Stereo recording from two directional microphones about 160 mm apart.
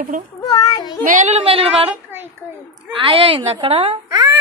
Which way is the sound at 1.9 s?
10° right (ahead or behind).